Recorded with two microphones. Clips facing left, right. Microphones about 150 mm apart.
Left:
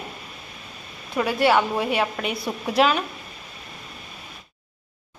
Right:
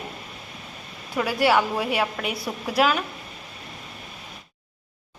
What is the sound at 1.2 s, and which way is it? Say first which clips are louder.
A woman's voice: left 1 dB; 5° right (ahead or behind).